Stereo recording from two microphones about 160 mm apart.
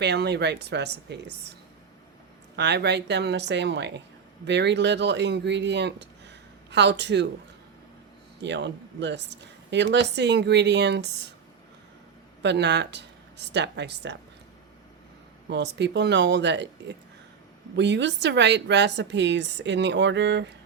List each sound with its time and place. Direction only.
0.0 s a woman's voice: 90° right
2.6 s a woman's voice: 90° right
8.4 s a woman's voice: 90° right
12.4 s speech: 90° right
15.4 s a woman's voice: 90° right
17.7 s a woman's voice: 90° right